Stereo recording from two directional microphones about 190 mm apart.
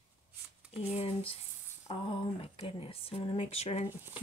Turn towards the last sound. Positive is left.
turn(degrees=35)  # may be behind; listen again after turning